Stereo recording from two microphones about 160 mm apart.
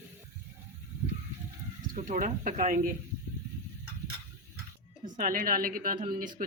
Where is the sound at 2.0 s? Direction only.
50° right (ahead or behind).